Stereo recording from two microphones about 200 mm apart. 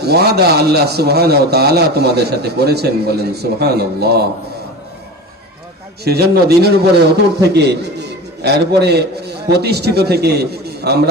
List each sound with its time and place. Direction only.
0.0 s a man's voice: 55° right (ahead or behind)
6.1 s a man's voice: 55° right (ahead or behind)